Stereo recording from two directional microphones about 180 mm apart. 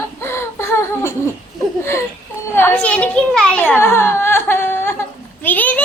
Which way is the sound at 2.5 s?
10° left (ahead or behind).